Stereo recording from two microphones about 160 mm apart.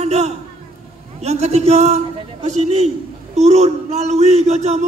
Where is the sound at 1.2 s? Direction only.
45° right (ahead or behind).